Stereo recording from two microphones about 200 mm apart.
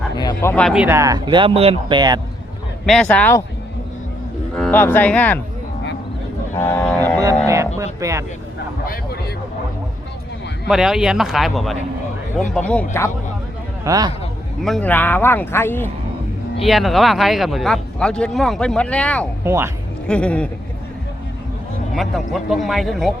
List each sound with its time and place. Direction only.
0.2 s a sound: 20° left (ahead or behind)
0.5 s speech: centre (ahead or behind); by 2.2 s 20° right (ahead or behind)
2.8 s speech: centre (ahead or behind)
4.5 s speech: 5° left (ahead or behind)
6.6 s a sound: 10° left (ahead or behind)
7.4 s a sound: 15° right (ahead or behind)
8.0 s speech: 15° right (ahead or behind)
10.7 s speech: centre (ahead or behind)
13.8 s speech: 20° right (ahead or behind)
14.6 s speech: 5° left (ahead or behind)
16.6 s speech: centre (ahead or behind)
19.5 s speech: 15° right (ahead or behind)
20.1 s speech: 5° left (ahead or behind)
21.9 s speech: centre (ahead or behind)